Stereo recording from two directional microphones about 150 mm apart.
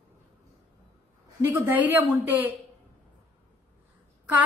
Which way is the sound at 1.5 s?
15° right (ahead or behind).